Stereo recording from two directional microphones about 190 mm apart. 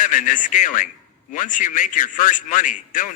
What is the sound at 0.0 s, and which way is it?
A man's voice, 45° left (ahead or behind).